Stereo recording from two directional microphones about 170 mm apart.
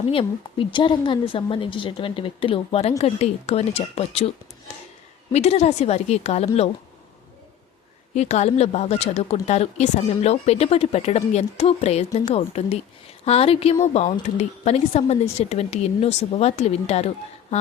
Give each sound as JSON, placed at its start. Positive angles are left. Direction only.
{"t": 0.1, "sound": "speech", "side_deg": 30}
{"t": 5.3, "sound": "speech", "side_deg": 40}
{"t": 8.1, "sound": "speech", "side_deg": 40}